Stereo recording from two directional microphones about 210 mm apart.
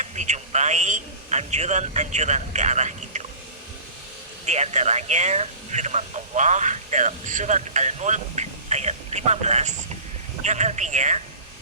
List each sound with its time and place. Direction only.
0.0 s a man's voice: 35° right (ahead or behind)
4.4 s speech: 30° right (ahead or behind)